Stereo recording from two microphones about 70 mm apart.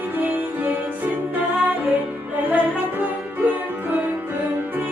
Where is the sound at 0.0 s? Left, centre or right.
Right.